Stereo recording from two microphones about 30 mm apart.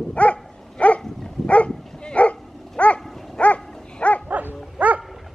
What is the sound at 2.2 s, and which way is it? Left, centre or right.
Dog, left.